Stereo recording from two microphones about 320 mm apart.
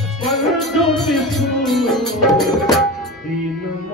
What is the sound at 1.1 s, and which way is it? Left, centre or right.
Music, centre.